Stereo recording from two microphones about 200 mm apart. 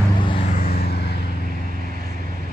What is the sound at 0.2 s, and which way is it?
Vehicle, 25° left (ahead or behind).